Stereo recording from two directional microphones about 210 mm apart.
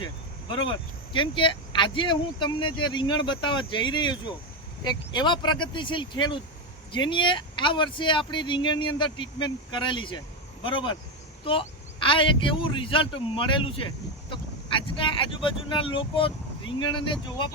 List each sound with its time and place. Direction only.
1.1 s a man's voice: 25° left (ahead or behind)